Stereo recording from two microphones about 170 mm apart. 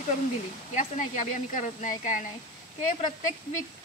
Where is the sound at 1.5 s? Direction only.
50° left (ahead or behind).